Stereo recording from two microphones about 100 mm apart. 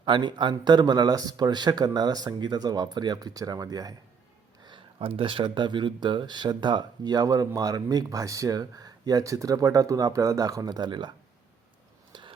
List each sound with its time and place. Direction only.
0.0 s speech: 50° right (ahead or behind)
4.6 s speech: 60° right (ahead or behind)
12.1 s a sound: 55° right (ahead or behind)